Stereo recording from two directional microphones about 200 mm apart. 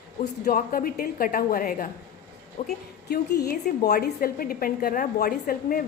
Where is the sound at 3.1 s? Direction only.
50° left (ahead or behind).